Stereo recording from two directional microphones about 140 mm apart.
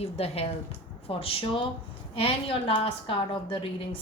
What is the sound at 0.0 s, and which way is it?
A woman's voice, 45° left (ahead or behind).